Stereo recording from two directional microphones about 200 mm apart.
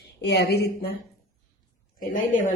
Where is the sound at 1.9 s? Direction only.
40° left (ahead or behind).